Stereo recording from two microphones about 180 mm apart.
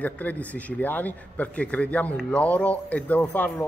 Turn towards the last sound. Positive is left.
turn(degrees=10)  # may be behind; listen again after turning